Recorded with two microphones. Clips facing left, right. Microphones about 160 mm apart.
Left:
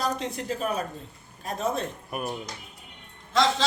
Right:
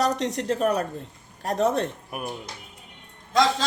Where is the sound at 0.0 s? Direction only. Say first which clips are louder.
Right 5 dB; 75° right (ahead or behind).